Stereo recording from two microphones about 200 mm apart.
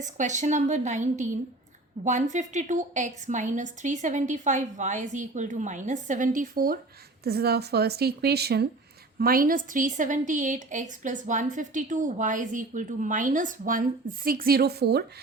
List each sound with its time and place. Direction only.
0.0 s a woman's voice: 40° right (ahead or behind); by 15.0 s 55° right (ahead or behind)